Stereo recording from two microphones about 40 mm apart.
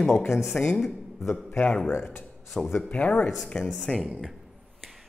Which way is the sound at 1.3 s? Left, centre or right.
Left.